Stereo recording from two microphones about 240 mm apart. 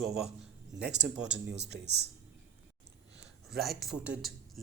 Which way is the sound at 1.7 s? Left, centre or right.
Right.